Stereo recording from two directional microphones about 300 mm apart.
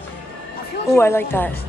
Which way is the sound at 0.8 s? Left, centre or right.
Centre.